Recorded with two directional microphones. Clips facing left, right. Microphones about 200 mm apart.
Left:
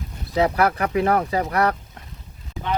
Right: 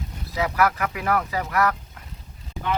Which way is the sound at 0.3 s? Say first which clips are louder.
Left 3 dB; 30° left (ahead or behind).